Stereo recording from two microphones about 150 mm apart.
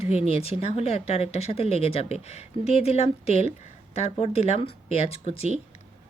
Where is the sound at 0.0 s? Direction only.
45° left (ahead or behind).